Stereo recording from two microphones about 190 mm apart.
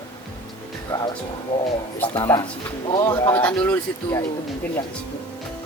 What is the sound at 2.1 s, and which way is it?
Speech, 15° left (ahead or behind).